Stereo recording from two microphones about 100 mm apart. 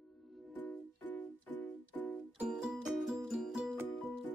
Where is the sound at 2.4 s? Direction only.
5° right (ahead or behind).